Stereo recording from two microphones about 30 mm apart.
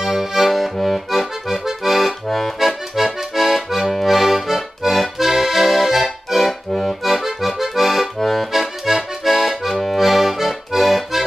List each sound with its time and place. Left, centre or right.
0.0 s accordion: centre
0.8 s accordion: centre
2.2 s accordion: centre
2.6 s accordion: centre
6.7 s accordion: centre
7.1 s accordion: centre
8.2 s accordion: centre
8.5 s accordion: centre